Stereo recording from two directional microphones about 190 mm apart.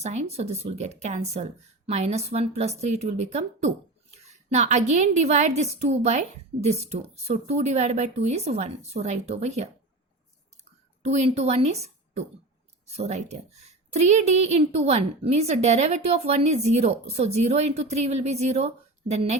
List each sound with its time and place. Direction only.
0.0 s a woman's voice: 35° right (ahead or behind)
11.0 s a woman's voice: 35° right (ahead or behind)